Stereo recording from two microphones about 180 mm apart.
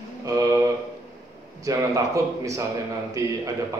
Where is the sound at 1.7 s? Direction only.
20° right (ahead or behind).